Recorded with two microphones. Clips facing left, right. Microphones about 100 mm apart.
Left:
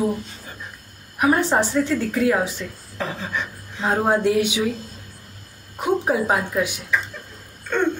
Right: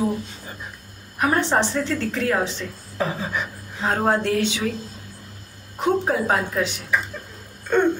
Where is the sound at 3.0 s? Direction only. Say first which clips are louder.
Right 2 dB; 10° right (ahead or behind).